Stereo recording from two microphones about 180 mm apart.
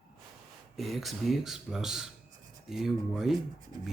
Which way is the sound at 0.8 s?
Centre (ahead or behind).